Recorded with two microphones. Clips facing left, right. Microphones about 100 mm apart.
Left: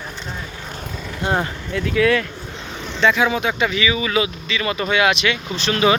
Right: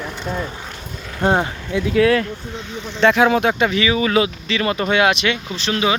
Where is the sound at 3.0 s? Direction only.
55° right (ahead or behind); by 5.4 s 35° right (ahead or behind).